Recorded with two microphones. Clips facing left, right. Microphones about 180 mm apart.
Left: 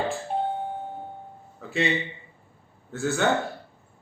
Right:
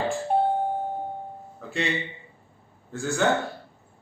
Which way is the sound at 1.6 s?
Centre (ahead or behind).